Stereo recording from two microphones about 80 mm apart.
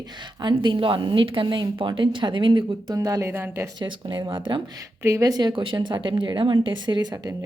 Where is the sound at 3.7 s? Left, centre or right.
Right.